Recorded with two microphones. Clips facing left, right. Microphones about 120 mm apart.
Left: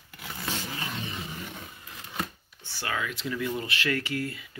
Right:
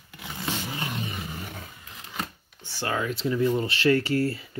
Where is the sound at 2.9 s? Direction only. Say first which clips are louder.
Right 5 dB; 35° right (ahead or behind).